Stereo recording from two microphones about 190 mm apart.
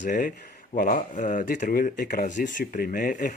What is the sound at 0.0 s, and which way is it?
Speech, 45° left (ahead or behind).